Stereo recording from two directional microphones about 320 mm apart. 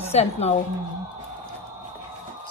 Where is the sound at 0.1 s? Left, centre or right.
Centre.